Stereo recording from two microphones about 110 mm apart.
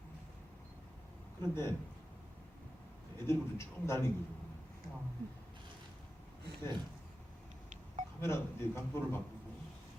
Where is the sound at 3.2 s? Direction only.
25° left (ahead or behind).